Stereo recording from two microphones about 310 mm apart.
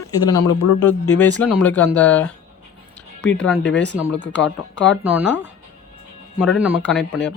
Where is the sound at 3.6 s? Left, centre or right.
Left.